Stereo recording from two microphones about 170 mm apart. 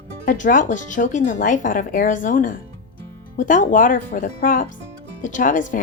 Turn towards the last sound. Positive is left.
turn(degrees=50)  # may be behind; listen again after turning